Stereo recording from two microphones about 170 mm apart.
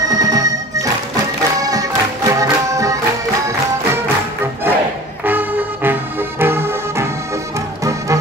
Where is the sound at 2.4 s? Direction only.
20° right (ahead or behind).